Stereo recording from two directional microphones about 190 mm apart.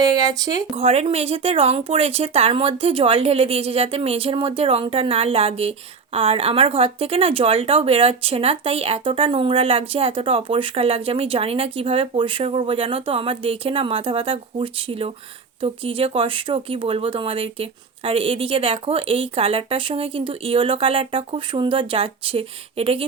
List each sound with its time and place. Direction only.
0.0 s speech: 20° right (ahead or behind)
0.8 s speech: 30° right (ahead or behind)